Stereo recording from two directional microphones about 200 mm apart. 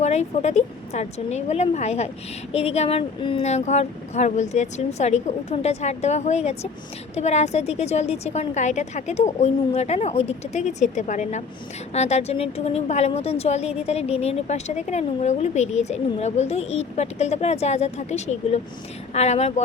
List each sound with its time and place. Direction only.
0.0 s a woman's voice: 35° left (ahead or behind)